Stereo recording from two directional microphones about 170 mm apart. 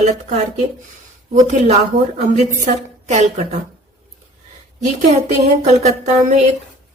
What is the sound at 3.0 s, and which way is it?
Speech, 40° right (ahead or behind).